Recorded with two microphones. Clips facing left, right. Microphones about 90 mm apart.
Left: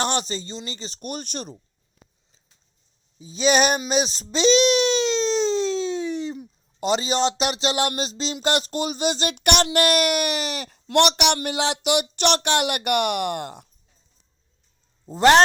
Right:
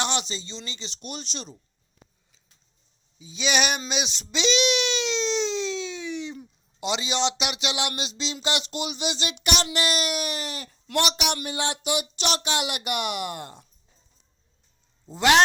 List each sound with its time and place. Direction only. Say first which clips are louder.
0.0 s speech: left 4 dB; 45° left (ahead or behind)
3.2 s speech: left 6 dB; 40° left (ahead or behind)
3.8 s baby cry: left 7 dB; 40° left (ahead or behind)
6.7 s speech: left 5 dB; 45° left (ahead or behind); by 10.8 s 90° left
10.9 s speech: left 7 dB; 65° left (ahead or behind)
11.4 s a sound: left 5 dB; 90° left
12.1 s speech: left 6 dB; 55° left (ahead or behind); by 13.7 s 75° left (ahead or behind)
15.0 s speech: left 5 dB; 45° left (ahead or behind)